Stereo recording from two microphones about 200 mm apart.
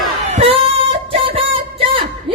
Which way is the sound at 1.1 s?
25° right (ahead or behind).